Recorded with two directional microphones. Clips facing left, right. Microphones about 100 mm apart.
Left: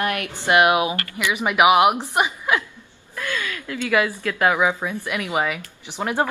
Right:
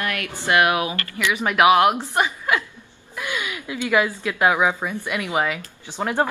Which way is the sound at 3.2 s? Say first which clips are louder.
Left 1 dB; 15° right (ahead or behind).